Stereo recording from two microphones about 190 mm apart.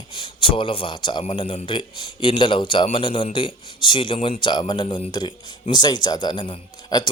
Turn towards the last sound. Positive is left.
turn(degrees=25)  # may be behind; listen again after turning